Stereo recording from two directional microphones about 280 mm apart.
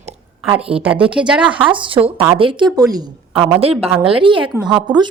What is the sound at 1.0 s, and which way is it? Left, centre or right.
Speech, centre.